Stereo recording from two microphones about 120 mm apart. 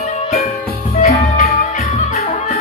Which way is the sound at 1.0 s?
75° left (ahead or behind).